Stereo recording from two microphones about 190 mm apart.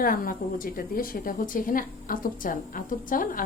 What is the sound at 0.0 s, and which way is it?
Speech, 50° left (ahead or behind).